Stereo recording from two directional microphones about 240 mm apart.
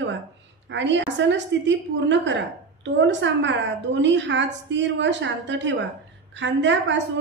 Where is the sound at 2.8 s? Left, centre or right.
Right.